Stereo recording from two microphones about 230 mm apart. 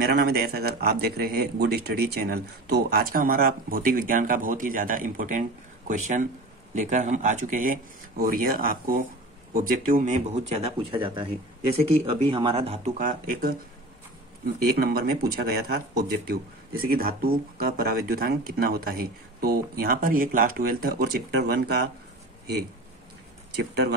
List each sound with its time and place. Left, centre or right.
0.0 s speech: right
12.3 s speech: right
14.8 s speech: right
23.5 s speech: right